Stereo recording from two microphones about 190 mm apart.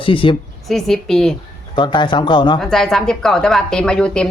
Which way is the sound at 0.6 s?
Centre (ahead or behind).